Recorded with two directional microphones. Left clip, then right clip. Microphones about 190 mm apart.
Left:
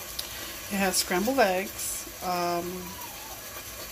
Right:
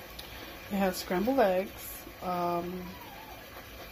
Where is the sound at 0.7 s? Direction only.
5° right (ahead or behind).